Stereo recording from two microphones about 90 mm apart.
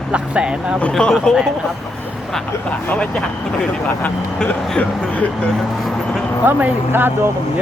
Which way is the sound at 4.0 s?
15° left (ahead or behind).